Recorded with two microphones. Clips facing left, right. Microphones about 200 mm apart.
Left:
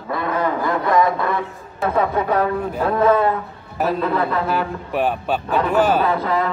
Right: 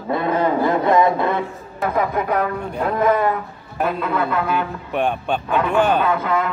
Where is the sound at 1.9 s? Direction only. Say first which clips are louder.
Left 2 dB; 30° left (ahead or behind).